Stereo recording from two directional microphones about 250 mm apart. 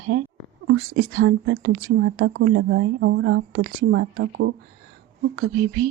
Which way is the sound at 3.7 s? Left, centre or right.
Right.